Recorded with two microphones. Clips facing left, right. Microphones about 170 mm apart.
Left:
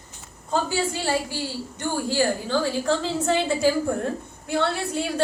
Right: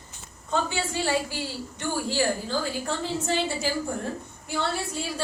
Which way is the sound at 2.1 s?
70° left (ahead or behind).